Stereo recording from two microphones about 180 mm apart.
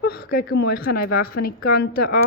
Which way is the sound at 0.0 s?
55° left (ahead or behind).